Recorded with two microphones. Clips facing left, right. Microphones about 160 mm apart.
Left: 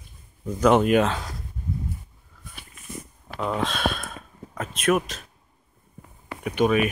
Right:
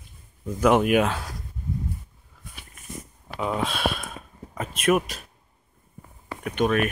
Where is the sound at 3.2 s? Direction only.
5° right (ahead or behind).